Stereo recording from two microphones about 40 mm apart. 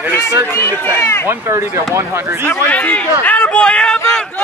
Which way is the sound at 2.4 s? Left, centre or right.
Left.